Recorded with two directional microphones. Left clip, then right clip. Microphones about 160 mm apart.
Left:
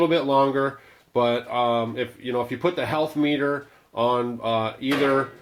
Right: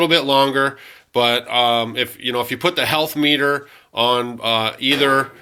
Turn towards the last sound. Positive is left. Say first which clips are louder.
# right 6 dB
turn(degrees=-15)  # may be behind; listen again after turning